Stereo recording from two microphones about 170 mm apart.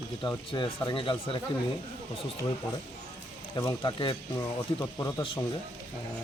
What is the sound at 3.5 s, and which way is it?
Speech, 20° left (ahead or behind).